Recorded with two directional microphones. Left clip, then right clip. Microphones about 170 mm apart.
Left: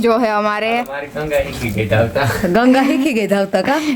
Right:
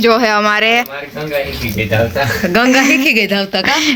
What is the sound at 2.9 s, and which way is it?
Speech, 35° left (ahead or behind).